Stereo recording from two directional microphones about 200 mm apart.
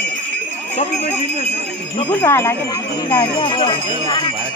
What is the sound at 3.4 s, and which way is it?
Speech, 25° left (ahead or behind).